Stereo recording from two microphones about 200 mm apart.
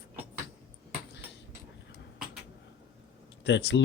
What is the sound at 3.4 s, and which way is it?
Speech, 60° left (ahead or behind).